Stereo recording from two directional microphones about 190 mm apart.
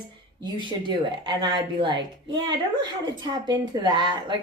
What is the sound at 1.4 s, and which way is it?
Speech, 25° right (ahead or behind).